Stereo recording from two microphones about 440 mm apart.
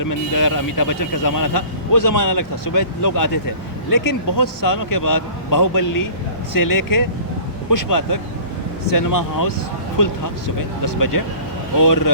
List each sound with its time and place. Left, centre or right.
0.0 s speech: left
11.1 s speech: left